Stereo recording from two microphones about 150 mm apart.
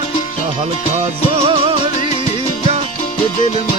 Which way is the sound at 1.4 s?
40° right (ahead or behind).